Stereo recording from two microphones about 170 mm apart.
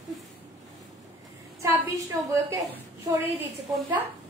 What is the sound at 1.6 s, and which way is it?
A woman's voice, 20° right (ahead or behind).